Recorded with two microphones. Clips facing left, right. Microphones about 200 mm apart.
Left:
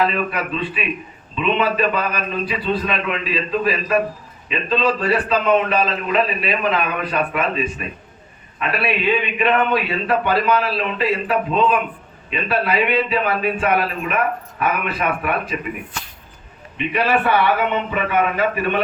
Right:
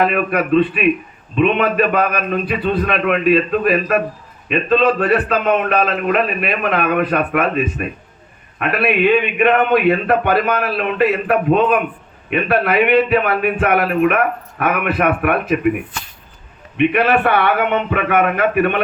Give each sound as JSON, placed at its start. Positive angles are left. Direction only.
{"t": 0.0, "sound": "a man's voice", "side_deg": -55}
{"t": 16.7, "sound": "a man's voice", "side_deg": -60}